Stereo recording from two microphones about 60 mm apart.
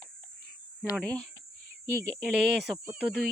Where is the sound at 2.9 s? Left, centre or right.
Right.